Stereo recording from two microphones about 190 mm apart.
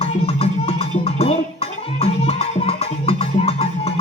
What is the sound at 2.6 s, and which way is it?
Music, 30° left (ahead or behind).